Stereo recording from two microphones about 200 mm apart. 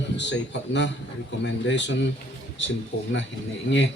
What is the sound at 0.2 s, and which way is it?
Speech, 60° left (ahead or behind).